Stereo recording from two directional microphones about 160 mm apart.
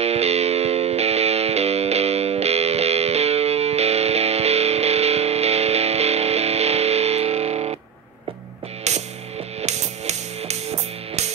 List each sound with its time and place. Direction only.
0.0 s music: 40° right (ahead or behind)
8.9 s music: 45° right (ahead or behind)